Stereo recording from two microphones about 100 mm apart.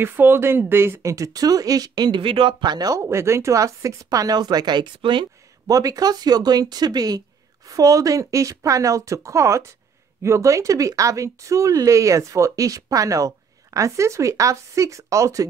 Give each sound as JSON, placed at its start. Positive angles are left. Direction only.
{"t": 0.0, "sound": "speech", "side_deg": -20}
{"t": 5.7, "sound": "speech", "side_deg": -35}